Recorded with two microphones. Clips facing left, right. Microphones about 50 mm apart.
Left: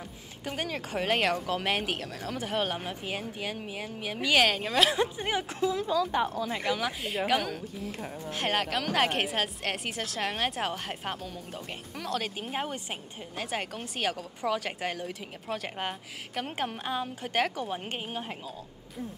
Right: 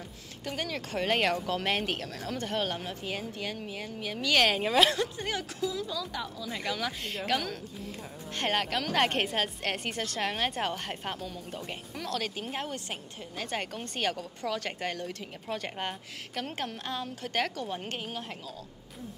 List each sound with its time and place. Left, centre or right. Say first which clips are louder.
0.5 s speech: left 1 dB; centre
4.5 s a woman's voice: right 1 dB; centre
4.9 s speech: left 3 dB; left
5.6 s a woman's voice: left 6 dB; left
6.5 s a woman's voice: left 3 dB; centre